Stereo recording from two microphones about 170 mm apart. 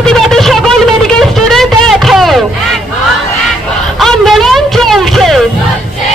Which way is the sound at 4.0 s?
Centre (ahead or behind).